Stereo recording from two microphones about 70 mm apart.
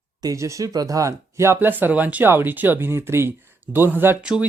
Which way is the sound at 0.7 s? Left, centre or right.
Right.